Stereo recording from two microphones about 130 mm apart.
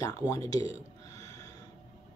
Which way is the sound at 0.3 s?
30° left (ahead or behind).